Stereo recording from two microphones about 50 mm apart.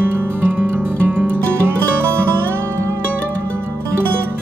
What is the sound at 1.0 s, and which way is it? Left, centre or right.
Music, right.